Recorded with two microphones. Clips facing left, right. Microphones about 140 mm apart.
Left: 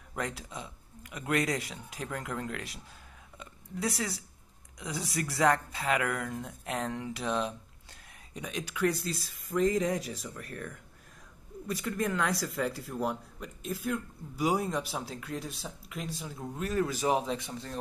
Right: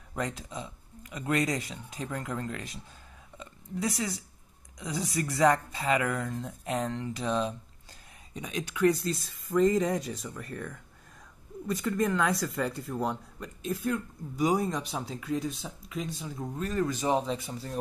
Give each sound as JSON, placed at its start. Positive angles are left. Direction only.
{"t": 0.1, "sound": "speech", "side_deg": 5}
{"t": 3.3, "sound": "a sound", "side_deg": 0}
{"t": 4.7, "sound": "speech", "side_deg": 0}